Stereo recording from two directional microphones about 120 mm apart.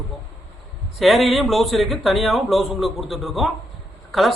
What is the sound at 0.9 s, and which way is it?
A man's voice, centre (ahead or behind).